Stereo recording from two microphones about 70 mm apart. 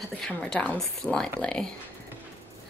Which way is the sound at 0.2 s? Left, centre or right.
Centre.